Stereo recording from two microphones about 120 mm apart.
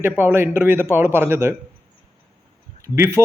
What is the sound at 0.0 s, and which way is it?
Speech, 20° right (ahead or behind).